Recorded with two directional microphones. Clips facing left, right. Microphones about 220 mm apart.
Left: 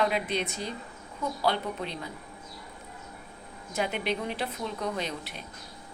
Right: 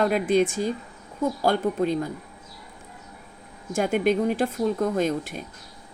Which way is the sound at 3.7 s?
45° right (ahead or behind).